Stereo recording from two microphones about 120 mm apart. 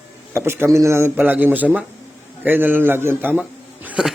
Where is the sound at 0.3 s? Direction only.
20° right (ahead or behind).